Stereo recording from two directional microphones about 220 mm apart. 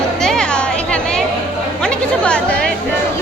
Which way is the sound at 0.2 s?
5° left (ahead or behind).